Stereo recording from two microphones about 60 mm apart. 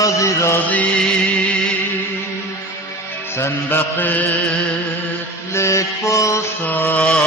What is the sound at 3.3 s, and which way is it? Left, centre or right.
Music, left.